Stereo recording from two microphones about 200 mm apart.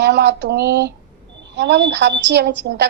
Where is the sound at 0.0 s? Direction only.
60° right (ahead or behind).